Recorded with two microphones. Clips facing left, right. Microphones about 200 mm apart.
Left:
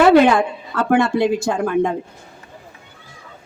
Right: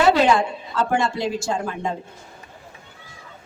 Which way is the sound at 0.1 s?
55° left (ahead or behind).